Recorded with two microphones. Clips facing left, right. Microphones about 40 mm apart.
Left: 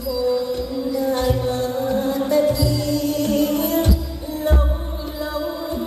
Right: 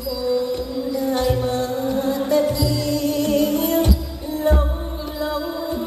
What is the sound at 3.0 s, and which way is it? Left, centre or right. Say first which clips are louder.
Music: right 1 dB; right.